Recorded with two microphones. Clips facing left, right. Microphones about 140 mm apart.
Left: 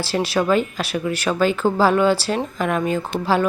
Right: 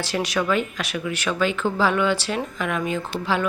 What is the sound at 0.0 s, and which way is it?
Speech, 30° left (ahead or behind).